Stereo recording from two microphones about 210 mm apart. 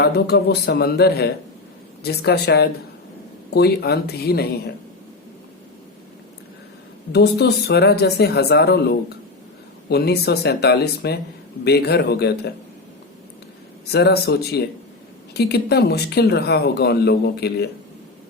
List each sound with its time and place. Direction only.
0.0 s speech: 50° left (ahead or behind)
7.1 s speech: 50° left (ahead or behind)
13.9 s speech: 50° left (ahead or behind)